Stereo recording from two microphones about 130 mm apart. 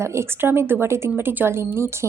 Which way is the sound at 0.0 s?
20° right (ahead or behind).